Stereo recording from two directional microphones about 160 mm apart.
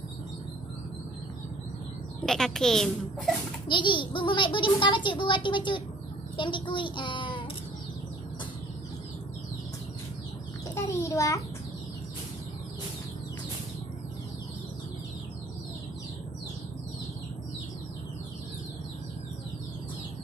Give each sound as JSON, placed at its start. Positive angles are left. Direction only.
{"t": 2.2, "sound": "speech", "side_deg": 5}
{"t": 3.6, "sound": "a child's voice", "side_deg": 30}
{"t": 10.7, "sound": "a child's voice", "side_deg": 20}